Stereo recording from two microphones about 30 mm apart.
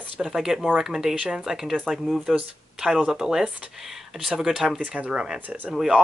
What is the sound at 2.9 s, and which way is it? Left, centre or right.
Speech, right.